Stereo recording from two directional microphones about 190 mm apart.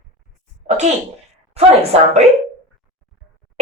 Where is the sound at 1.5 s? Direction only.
30° right (ahead or behind).